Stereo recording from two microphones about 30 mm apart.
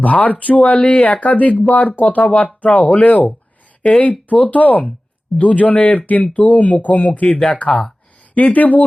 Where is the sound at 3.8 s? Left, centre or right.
Left.